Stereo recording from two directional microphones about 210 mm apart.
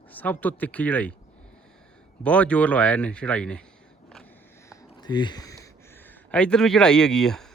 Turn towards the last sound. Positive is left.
turn(degrees=0)  # may be behind; listen again after turning